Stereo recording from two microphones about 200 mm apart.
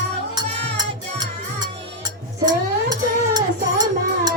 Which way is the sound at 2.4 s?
20° right (ahead or behind).